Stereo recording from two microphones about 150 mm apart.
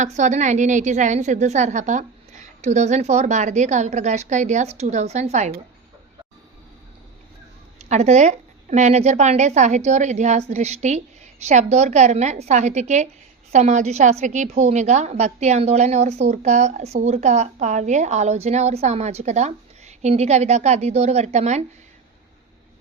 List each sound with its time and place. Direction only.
0.0 s a woman's voice: 55° right (ahead or behind)
7.8 s a woman's voice: 50° right (ahead or behind)